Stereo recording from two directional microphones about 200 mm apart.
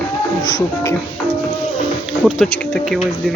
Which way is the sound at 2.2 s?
5° left (ahead or behind).